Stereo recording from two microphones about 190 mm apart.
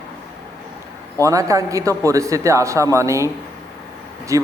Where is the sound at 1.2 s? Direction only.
15° right (ahead or behind).